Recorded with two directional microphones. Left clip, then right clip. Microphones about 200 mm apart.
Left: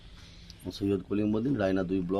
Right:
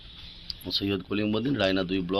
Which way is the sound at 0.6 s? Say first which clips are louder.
Right 2 dB; 5° left (ahead or behind).